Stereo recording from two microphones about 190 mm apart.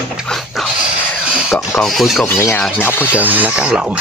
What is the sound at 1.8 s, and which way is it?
Speech, centre (ahead or behind).